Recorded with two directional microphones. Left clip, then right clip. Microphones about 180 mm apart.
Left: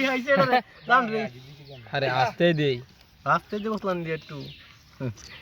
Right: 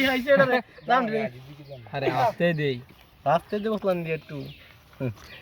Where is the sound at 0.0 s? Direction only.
5° left (ahead or behind).